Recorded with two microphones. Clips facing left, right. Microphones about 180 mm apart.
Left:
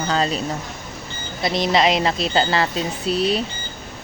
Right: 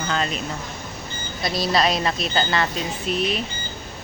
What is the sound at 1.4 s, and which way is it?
Speech, 25° left (ahead or behind).